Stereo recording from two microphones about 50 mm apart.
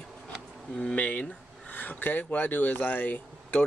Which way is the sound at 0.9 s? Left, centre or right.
Left.